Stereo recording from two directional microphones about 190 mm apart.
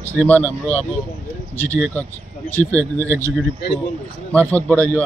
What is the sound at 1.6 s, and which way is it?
Speech, 15° right (ahead or behind).